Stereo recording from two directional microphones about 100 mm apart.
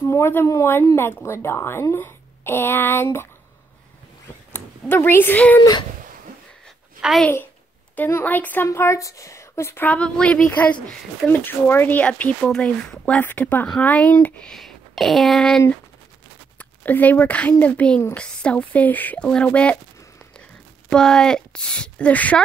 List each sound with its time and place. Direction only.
0.0 s speech: 25° left (ahead or behind)
4.5 s speech: 20° left (ahead or behind)
5.6 s speech: 45° left (ahead or behind)
7.0 s a woman's voice: 5° right (ahead or behind)
7.9 s a woman's voice: 20° left (ahead or behind)
8.6 s a woman's voice: 30° left (ahead or behind); by 15.6 s 5° left (ahead or behind)
16.5 s a woman's voice: 15° left (ahead or behind)
20.9 s a woman's voice: 5° left (ahead or behind)